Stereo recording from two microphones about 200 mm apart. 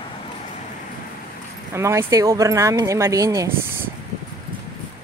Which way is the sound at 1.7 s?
15° right (ahead or behind).